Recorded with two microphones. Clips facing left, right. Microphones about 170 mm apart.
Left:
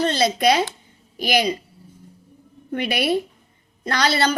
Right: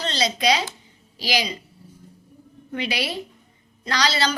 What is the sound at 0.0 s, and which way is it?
A woman's voice, 55° left (ahead or behind).